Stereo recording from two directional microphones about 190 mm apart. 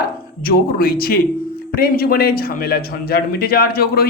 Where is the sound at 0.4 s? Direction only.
50° left (ahead or behind).